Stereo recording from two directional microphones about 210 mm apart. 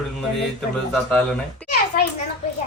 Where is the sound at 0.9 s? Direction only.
5° left (ahead or behind).